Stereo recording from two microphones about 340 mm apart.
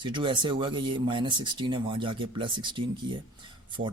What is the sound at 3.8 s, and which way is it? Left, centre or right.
Speech, right.